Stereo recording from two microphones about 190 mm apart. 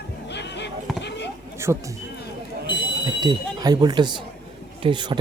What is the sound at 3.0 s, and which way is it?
A man's voice, 20° right (ahead or behind).